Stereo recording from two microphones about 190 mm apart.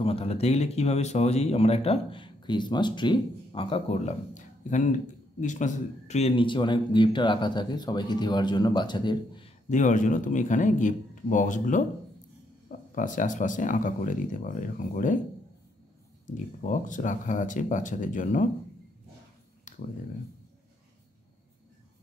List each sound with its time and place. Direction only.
0.0 s speech: 30° left (ahead or behind)
9.7 s speech: 40° left (ahead or behind)
16.6 s speech: 40° left (ahead or behind)